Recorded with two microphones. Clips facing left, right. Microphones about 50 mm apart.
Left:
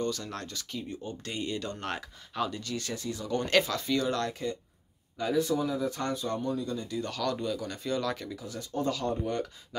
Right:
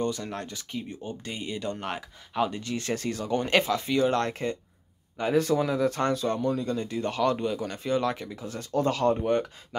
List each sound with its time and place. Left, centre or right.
0.0 s speech: right
1.2 s speech: centre
2.4 s speech: right
2.9 s speech: right
3.3 s speech: right
5.3 s speech: right
6.9 s speech: right
8.8 s speech: right